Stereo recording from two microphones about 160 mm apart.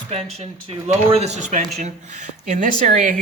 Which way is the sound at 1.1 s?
45° right (ahead or behind).